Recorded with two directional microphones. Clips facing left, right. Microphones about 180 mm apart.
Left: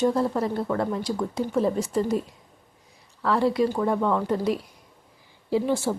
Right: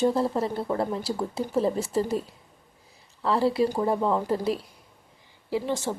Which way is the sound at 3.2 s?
30° right (ahead or behind).